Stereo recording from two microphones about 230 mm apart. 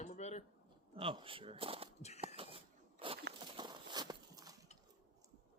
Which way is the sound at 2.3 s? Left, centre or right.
Right.